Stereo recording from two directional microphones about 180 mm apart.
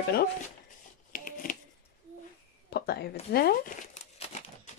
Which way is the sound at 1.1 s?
50° left (ahead or behind).